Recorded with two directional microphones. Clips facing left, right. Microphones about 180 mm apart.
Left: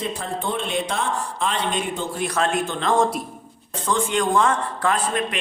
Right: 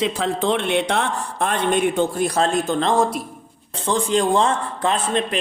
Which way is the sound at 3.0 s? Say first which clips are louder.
Right 1 dB; centre (ahead or behind).